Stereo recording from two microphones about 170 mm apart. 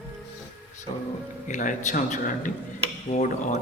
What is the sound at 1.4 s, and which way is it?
Speech, 50° left (ahead or behind).